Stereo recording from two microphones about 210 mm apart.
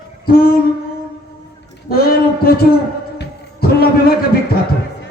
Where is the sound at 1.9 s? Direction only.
45° left (ahead or behind).